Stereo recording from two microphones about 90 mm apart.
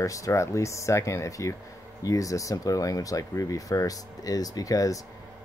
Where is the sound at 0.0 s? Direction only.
35° left (ahead or behind).